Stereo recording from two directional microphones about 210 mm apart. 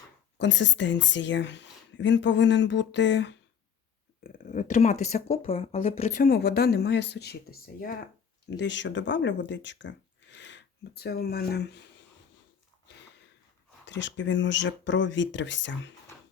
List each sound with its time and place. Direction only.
0.3 s speech: 60° left (ahead or behind)
4.2 s speech: 35° left (ahead or behind)
6.1 s speech: 45° left (ahead or behind)
13.8 s speech: 60° left (ahead or behind)